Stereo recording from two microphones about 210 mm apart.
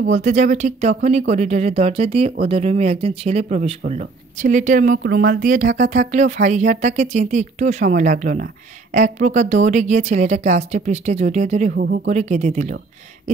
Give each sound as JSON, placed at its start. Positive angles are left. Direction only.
{"t": 0.1, "sound": "speech", "side_deg": -35}
{"t": 11.7, "sound": "speech", "side_deg": -50}
{"t": 12.1, "sound": "speech", "side_deg": -35}